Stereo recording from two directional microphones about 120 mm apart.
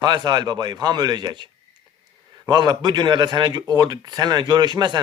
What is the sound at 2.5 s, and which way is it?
Speech, 35° right (ahead or behind).